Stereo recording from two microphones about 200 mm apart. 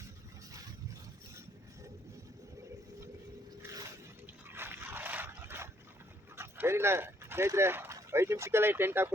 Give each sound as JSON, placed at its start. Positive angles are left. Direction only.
{"t": 3.6, "sound": "a sound", "side_deg": -15}
{"t": 4.4, "sound": "dog", "side_deg": -10}
{"t": 6.3, "sound": "speech", "side_deg": -10}